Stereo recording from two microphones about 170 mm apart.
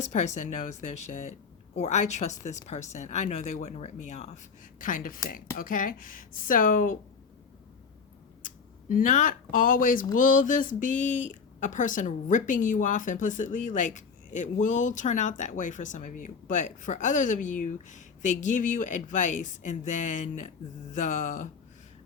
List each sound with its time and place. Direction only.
0.0 s a woman's voice: 45° left (ahead or behind)
4.8 s speech: 55° left (ahead or behind)
8.4 s speech: 55° left (ahead or behind)